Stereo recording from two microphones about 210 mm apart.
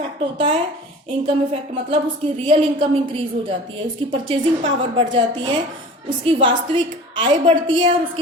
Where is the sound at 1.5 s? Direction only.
25° right (ahead or behind).